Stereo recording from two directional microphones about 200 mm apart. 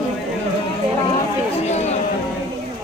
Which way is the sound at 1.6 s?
35° left (ahead or behind).